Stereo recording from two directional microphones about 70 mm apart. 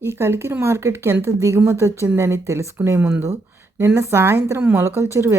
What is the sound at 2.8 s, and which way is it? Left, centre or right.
A woman's voice, right.